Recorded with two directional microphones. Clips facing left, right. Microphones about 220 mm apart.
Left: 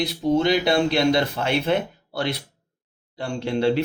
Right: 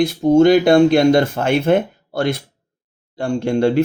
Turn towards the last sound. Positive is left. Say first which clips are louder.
# right 5 dB
turn(degrees=-50)  # may be behind; listen again after turning